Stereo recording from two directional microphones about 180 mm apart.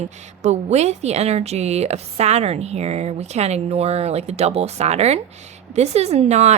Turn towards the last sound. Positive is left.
turn(degrees=-40)  # may be behind; listen again after turning